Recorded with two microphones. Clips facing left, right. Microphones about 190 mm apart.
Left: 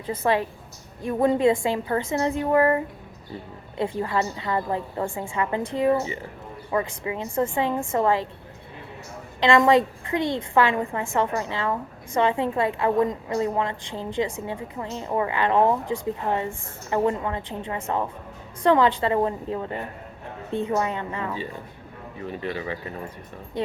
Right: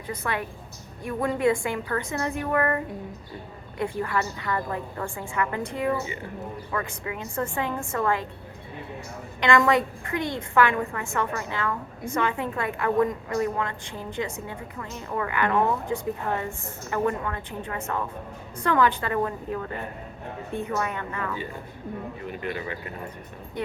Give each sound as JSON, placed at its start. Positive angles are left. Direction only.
{"t": 0.1, "sound": "a woman's voice", "side_deg": 25}
{"t": 9.4, "sound": "a woman's voice", "side_deg": 25}